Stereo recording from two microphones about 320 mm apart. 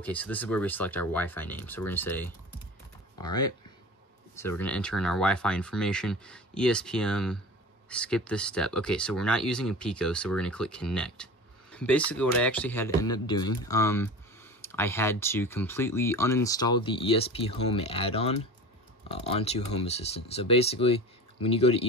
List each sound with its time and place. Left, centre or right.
0.0 s speech: centre